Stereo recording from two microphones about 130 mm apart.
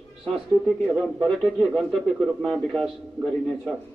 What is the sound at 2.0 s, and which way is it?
Speech, centre (ahead or behind).